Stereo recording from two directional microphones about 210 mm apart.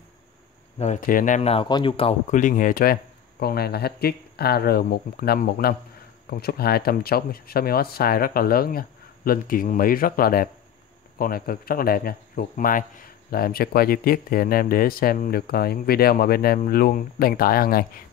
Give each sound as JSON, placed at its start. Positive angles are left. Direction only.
{"t": 0.7, "sound": "speech", "side_deg": 35}
{"t": 2.3, "sound": "speech", "side_deg": 40}